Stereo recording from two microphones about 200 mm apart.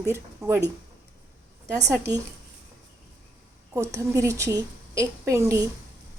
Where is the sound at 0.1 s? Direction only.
15° right (ahead or behind).